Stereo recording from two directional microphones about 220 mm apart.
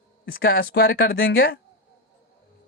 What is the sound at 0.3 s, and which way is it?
Speech, 45° left (ahead or behind).